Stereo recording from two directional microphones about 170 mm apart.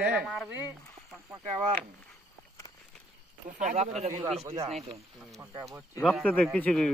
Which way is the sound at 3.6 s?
45° right (ahead or behind).